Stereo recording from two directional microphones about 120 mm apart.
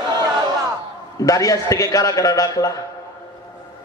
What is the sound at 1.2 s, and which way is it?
A man's voice, 30° left (ahead or behind).